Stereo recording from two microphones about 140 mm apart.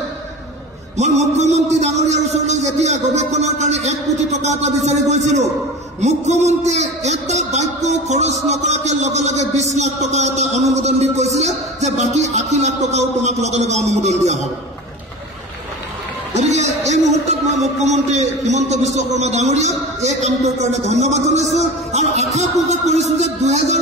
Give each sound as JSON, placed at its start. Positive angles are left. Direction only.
{"t": 0.9, "sound": "a man's voice", "side_deg": -55}
{"t": 16.3, "sound": "a man's voice", "side_deg": -55}